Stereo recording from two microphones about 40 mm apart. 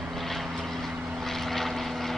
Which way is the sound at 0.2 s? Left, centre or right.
Centre.